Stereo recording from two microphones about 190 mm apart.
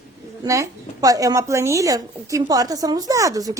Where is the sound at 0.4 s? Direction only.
15° right (ahead or behind).